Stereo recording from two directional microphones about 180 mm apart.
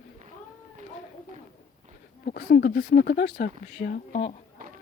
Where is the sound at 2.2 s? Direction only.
55° left (ahead or behind); by 4.3 s 40° left (ahead or behind).